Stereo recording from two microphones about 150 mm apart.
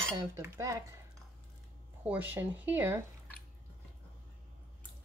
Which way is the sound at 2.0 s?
10° right (ahead or behind).